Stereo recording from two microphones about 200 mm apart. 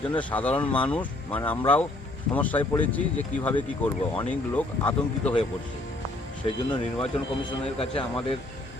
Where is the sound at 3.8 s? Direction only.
5° left (ahead or behind).